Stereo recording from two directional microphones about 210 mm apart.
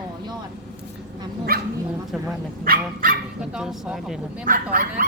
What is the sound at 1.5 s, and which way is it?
Dog, 45° right (ahead or behind).